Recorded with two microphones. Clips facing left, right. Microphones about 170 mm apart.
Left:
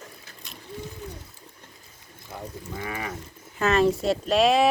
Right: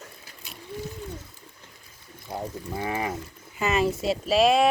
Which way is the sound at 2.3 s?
25° right (ahead or behind).